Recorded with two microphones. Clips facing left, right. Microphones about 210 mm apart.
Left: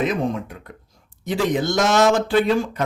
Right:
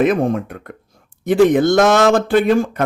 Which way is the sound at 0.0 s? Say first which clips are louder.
Right 7 dB; 55° right (ahead or behind).